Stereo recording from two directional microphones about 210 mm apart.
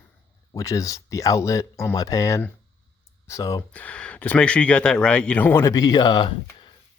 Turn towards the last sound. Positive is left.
turn(degrees=20)  # may be behind; listen again after turning